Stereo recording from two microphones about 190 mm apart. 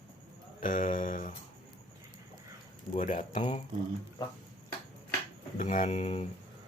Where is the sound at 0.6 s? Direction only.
45° left (ahead or behind).